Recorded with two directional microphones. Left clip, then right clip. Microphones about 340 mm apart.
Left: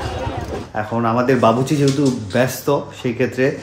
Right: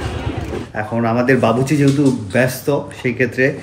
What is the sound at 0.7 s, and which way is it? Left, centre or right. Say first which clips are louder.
Speech: even; centre.